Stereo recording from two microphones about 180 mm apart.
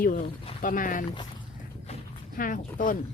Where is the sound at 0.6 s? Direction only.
50° left (ahead or behind).